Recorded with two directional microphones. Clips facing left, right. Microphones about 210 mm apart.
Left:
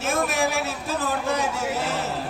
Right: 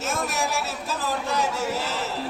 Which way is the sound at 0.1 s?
55° left (ahead or behind).